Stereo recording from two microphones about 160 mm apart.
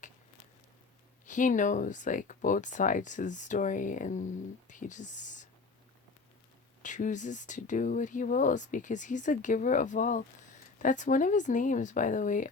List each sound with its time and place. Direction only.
1.2 s speech: 55° left (ahead or behind)
6.8 s speech: 50° left (ahead or behind)